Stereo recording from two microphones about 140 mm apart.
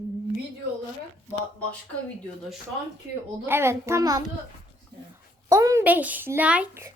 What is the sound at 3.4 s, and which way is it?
Speech, 15° right (ahead or behind).